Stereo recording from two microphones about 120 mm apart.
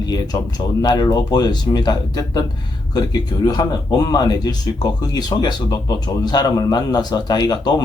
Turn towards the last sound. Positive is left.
turn(degrees=35)  # may be behind; listen again after turning